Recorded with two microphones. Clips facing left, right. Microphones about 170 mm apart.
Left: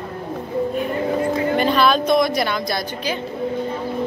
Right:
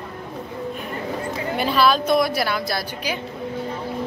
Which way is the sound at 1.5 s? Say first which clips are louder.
Even; 5° right (ahead or behind).